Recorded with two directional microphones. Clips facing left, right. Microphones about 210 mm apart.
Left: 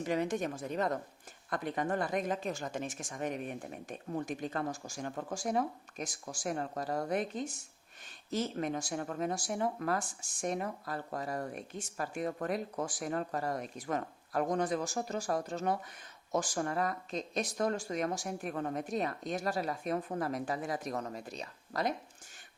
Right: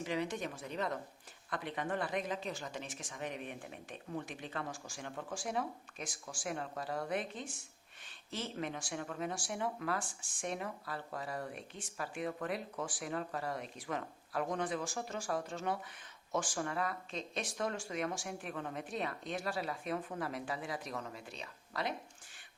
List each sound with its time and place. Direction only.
0.0 s speech: 45° left (ahead or behind)